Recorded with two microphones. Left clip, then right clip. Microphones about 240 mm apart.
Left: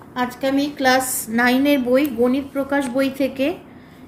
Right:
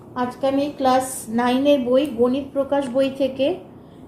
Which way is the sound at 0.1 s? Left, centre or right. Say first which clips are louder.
Even; left.